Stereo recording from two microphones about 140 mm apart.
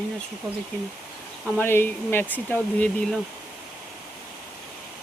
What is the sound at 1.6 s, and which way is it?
Speech, 15° left (ahead or behind).